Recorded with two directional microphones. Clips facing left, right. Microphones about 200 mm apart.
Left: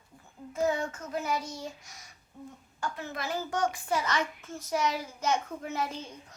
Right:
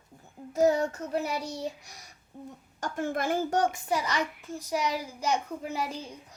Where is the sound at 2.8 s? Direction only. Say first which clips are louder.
Right 6 dB; 50° right (ahead or behind).